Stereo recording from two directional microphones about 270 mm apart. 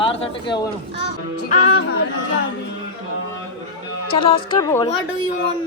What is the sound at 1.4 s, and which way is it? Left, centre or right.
Music, left.